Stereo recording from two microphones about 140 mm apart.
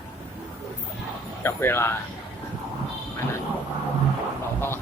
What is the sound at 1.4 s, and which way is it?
Speech, 15° left (ahead or behind).